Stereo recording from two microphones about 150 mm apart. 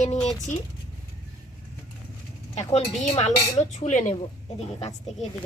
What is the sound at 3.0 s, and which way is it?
Speech, 50° left (ahead or behind).